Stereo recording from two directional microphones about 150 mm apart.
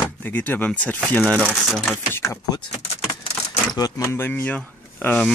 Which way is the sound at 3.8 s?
20° left (ahead or behind).